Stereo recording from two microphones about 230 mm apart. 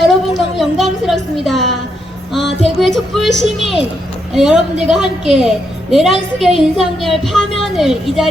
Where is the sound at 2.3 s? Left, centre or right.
Centre.